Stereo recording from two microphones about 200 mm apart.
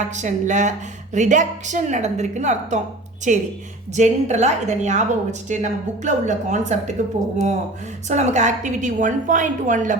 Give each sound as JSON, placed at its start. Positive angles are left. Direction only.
{"t": 0.1, "sound": "a woman's voice", "side_deg": -40}
{"t": 8.0, "sound": "a woman's voice", "side_deg": -35}